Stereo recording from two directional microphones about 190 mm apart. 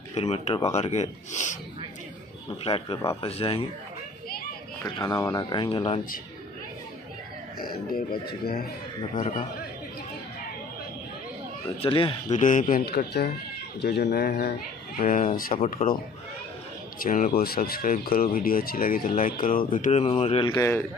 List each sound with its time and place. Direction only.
0.1 s speech: 35° left (ahead or behind)
2.6 s speech: 30° left (ahead or behind)
4.8 s speech: 20° left (ahead or behind)
7.5 s speech: 50° left (ahead or behind)
11.8 s speech: 30° left (ahead or behind)
12.4 s speech: 40° left (ahead or behind)
15.0 s speech: 40° left (ahead or behind)
17.0 s speech: 45° left (ahead or behind); by 20.8 s 15° left (ahead or behind)